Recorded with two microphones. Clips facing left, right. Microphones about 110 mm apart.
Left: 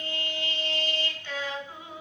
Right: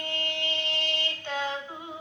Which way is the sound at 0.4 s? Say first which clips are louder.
Even; 20° right (ahead or behind).